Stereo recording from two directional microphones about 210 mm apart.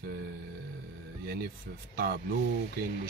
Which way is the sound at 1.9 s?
45° right (ahead or behind).